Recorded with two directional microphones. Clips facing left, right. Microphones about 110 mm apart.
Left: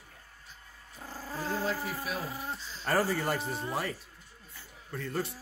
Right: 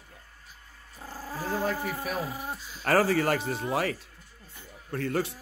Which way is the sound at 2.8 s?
90° right.